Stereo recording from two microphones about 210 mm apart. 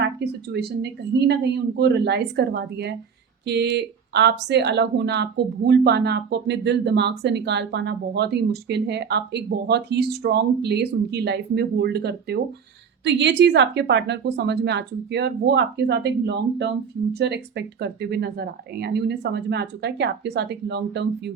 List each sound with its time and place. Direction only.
0.5 s a woman's voice: 50° right (ahead or behind)